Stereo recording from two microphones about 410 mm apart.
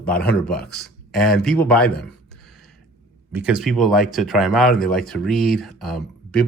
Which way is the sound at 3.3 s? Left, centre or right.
Centre.